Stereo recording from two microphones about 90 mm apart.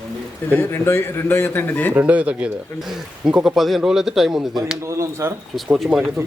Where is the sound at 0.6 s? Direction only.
30° left (ahead or behind).